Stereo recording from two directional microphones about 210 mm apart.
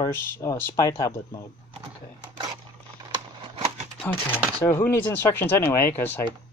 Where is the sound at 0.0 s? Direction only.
15° left (ahead or behind).